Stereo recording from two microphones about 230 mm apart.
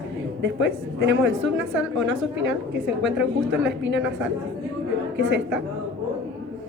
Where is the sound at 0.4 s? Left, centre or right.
Right.